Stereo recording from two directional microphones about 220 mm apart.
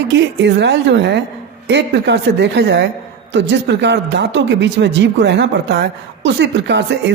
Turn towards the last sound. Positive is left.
turn(degrees=-50)  # may be behind; listen again after turning